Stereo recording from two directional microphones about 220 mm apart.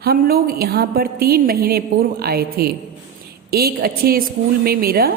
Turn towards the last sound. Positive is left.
turn(degrees=-45)  # may be behind; listen again after turning